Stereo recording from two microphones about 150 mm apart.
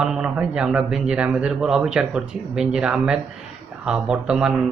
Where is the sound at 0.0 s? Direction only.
5° right (ahead or behind).